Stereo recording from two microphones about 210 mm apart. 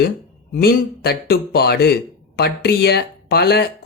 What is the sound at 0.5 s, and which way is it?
A man's voice, 45° left (ahead or behind).